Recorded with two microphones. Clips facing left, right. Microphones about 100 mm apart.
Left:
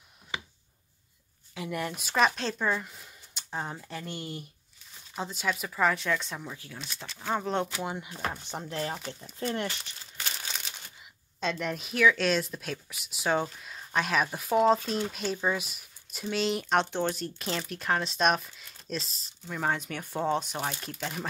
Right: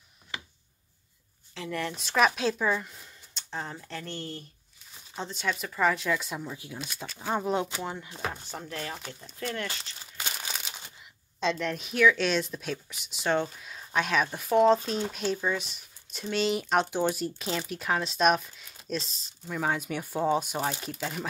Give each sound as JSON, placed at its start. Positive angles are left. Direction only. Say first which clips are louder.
{"t": 1.5, "sound": "speech", "louder": "even", "side_deg": 10}
{"t": 2.2, "sound": "speech", "louder": "right 3 dB", "side_deg": -5}
{"t": 2.8, "sound": "speech", "louder": "even", "side_deg": 5}
{"t": 7.8, "sound": "speech", "louder": "left 1 dB", "side_deg": 10}
{"t": 8.5, "sound": "speech", "louder": "left 3 dB", "side_deg": 25}
{"t": 10.1, "sound": "crumpling", "louder": "right 1 dB", "side_deg": -10}
{"t": 11.3, "sound": "speech", "louder": "right 2 dB", "side_deg": 5}